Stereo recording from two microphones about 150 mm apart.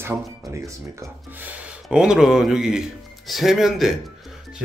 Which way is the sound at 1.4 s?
5° right (ahead or behind).